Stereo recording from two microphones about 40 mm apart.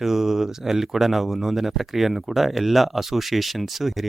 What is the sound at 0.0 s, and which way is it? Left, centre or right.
Speech, centre.